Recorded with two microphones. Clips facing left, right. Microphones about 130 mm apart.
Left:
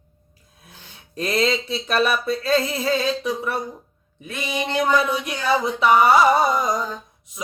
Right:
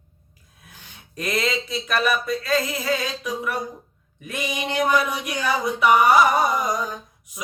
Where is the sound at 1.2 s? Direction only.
30° left (ahead or behind).